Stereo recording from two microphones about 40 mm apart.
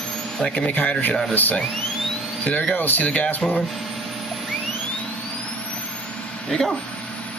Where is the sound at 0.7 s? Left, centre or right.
Left.